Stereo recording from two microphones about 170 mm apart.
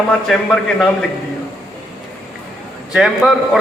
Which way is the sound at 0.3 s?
Centre (ahead or behind).